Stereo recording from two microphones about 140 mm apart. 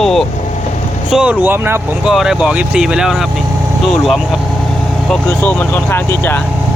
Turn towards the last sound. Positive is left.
turn(degrees=15)  # may be behind; listen again after turning